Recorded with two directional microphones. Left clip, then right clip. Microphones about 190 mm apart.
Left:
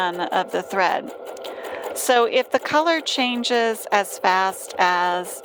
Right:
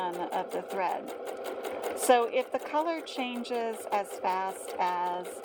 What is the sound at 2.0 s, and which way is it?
Speech, 45° left (ahead or behind).